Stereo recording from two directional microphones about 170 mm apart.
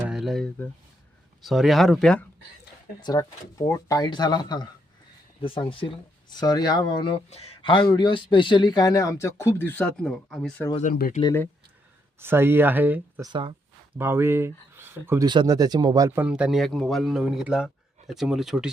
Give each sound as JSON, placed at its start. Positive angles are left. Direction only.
{"t": 0.0, "sound": "a sound", "side_deg": 0}
{"t": 1.4, "sound": "speech", "side_deg": 0}
{"t": 3.0, "sound": "speech", "side_deg": 20}
{"t": 7.3, "sound": "speech", "side_deg": 35}
{"t": 12.2, "sound": "speech", "side_deg": -15}
{"t": 15.3, "sound": "speech", "side_deg": -25}